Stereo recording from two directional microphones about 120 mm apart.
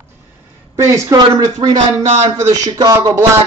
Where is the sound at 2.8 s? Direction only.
25° right (ahead or behind).